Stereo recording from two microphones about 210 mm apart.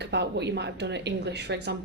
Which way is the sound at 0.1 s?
55° right (ahead or behind).